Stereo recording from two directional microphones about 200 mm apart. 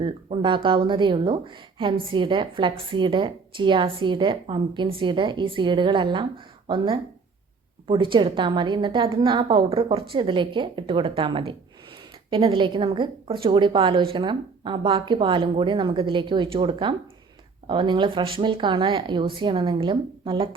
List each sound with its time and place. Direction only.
0.0 s speech: 25° right (ahead or behind)